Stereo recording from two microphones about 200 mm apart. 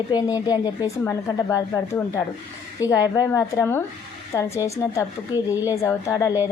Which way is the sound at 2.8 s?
15° left (ahead or behind).